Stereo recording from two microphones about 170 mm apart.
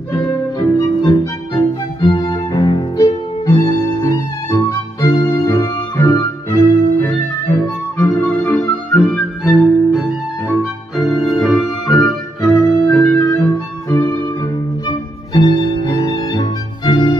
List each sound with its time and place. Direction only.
0.2 s music: 25° left (ahead or behind); by 12.5 s centre (ahead or behind)
12.8 s organ: 15° left (ahead or behind)
14.9 s music: 30° left (ahead or behind)